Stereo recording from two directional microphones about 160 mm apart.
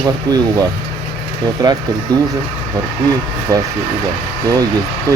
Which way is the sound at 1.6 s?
20° right (ahead or behind).